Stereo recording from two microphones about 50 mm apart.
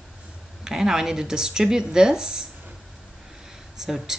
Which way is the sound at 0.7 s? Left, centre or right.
Centre.